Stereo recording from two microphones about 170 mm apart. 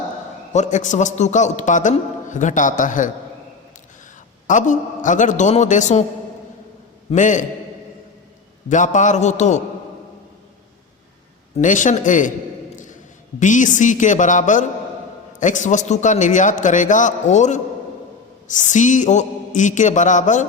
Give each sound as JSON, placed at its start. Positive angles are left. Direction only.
{"t": 0.5, "sound": "a man's voice", "side_deg": 45}
{"t": 4.4, "sound": "a man's voice", "side_deg": 45}
{"t": 7.1, "sound": "a man's voice", "side_deg": 45}
{"t": 8.7, "sound": "a man's voice", "side_deg": 45}
{"t": 11.5, "sound": "a man's voice", "side_deg": 50}
{"t": 13.4, "sound": "a man's voice", "side_deg": 50}